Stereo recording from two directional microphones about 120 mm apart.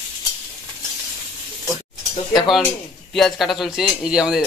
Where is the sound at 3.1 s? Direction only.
Centre (ahead or behind).